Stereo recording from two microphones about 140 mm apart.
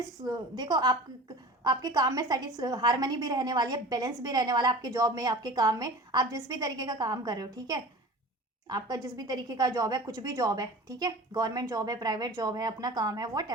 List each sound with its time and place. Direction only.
0.3 s a woman's voice: 30° right (ahead or behind)